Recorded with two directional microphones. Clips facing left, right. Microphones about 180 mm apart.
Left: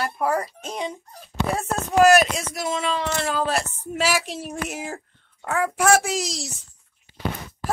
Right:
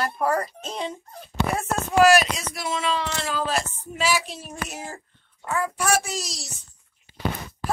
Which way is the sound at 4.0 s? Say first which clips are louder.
Left 1 dB; 90° left.